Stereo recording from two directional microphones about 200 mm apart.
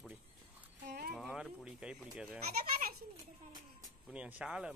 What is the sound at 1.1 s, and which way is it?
Speech, 5° right (ahead or behind).